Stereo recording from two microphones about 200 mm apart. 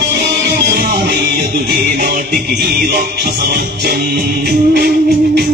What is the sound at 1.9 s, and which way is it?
Music, 45° right (ahead or behind).